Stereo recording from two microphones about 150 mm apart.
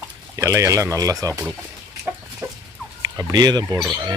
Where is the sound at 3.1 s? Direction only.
25° right (ahead or behind).